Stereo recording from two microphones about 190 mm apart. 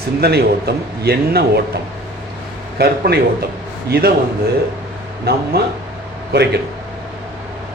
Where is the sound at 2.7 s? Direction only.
55° right (ahead or behind).